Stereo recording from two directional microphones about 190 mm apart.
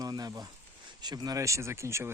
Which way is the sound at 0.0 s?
20° right (ahead or behind).